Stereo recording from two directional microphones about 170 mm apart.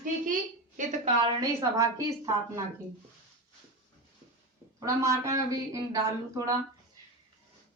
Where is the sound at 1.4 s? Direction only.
20° right (ahead or behind).